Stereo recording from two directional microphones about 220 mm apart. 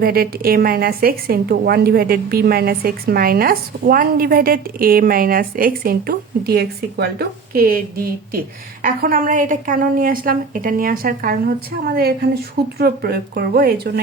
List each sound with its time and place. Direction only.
0.0 s a woman's voice: 45° right (ahead or behind)